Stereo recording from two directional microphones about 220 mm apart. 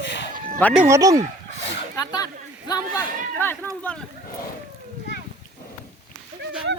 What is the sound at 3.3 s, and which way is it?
Speech, 10° left (ahead or behind).